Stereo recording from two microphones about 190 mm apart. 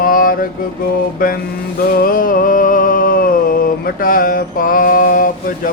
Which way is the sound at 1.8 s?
50° left (ahead or behind).